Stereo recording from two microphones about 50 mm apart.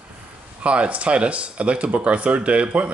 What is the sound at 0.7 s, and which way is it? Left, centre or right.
Speech, right.